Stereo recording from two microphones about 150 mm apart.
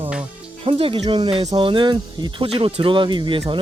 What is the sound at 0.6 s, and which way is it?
Speech, 35° right (ahead or behind).